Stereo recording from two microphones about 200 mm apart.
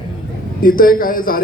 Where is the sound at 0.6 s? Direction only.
45° left (ahead or behind).